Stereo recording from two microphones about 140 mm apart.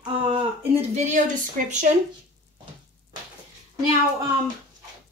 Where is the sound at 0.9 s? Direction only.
60° right (ahead or behind).